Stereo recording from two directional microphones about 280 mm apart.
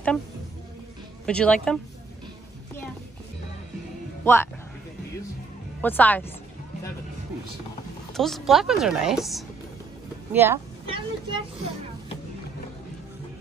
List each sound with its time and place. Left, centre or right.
1.2 s a woman's voice: centre
4.2 s speech: centre
5.8 s a woman's voice: centre
8.1 s a woman's voice: centre